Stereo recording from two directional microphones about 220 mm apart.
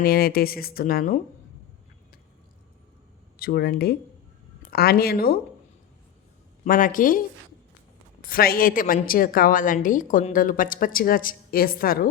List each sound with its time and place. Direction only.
0.0 s speech: 45° left (ahead or behind)
3.3 s speech: 45° left (ahead or behind)
6.7 s a woman's voice: 40° left (ahead or behind)